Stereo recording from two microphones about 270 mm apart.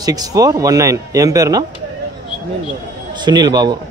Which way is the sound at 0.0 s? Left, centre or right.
Centre.